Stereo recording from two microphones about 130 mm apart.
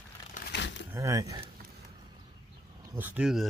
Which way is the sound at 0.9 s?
25° right (ahead or behind).